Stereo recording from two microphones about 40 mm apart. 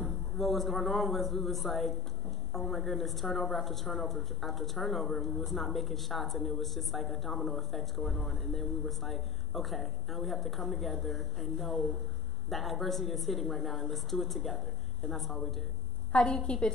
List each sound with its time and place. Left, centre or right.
0.0 s speech: centre
16.1 s a woman's voice: left